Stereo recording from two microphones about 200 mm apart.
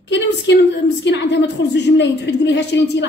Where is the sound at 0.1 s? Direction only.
60° left (ahead or behind).